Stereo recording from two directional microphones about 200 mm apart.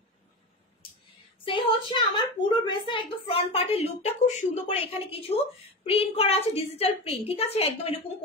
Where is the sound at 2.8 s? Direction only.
25° left (ahead or behind).